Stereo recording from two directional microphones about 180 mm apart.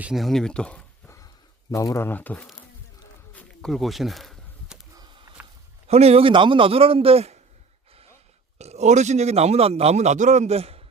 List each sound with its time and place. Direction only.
0.0 s speech: centre (ahead or behind)
3.3 s a sound: centre (ahead or behind)
5.9 s a man's voice: 35° right (ahead or behind)
8.5 s a man's voice: 35° right (ahead or behind)